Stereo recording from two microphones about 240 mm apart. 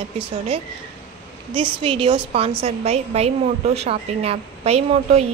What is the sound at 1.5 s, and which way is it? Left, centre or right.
A woman's voice, right.